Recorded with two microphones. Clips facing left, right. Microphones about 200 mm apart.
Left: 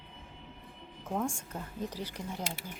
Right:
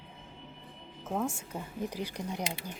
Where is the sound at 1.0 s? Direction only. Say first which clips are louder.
Right 1 dB; 5° right (ahead or behind).